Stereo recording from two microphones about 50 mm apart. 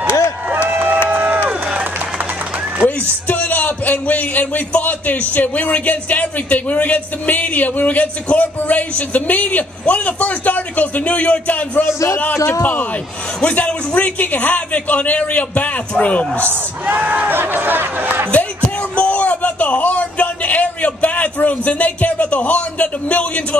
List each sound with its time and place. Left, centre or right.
0.0 s a sound: left
0.5 s run: right
2.8 s music: left
3.3 s a man's voice: left
13.4 s a man's voice: left
16.8 s speech: right
18.3 s music: left